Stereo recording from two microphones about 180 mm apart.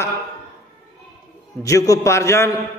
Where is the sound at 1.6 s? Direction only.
20° left (ahead or behind).